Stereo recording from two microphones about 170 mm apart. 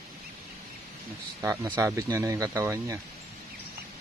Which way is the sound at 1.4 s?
15° right (ahead or behind).